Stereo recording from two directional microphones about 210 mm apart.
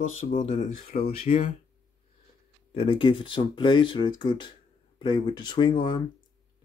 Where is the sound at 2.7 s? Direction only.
25° left (ahead or behind).